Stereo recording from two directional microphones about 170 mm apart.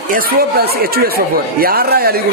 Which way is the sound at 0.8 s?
65° right (ahead or behind).